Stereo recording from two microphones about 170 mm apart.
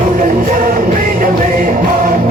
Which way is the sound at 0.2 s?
55° right (ahead or behind).